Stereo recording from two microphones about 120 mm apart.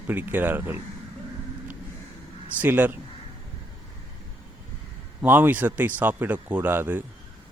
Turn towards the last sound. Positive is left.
turn(degrees=-15)  # may be behind; listen again after turning